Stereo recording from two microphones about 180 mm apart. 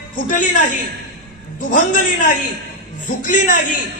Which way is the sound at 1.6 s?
45° left (ahead or behind).